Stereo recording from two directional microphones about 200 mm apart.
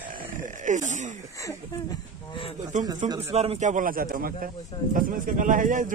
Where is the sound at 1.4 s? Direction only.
20° left (ahead or behind).